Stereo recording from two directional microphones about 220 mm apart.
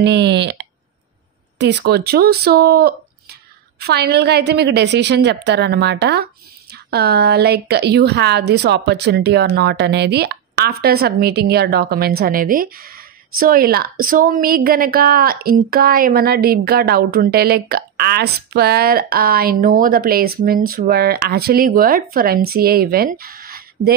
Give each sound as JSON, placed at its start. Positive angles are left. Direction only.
{"t": 0.0, "sound": "a woman's voice", "side_deg": -50}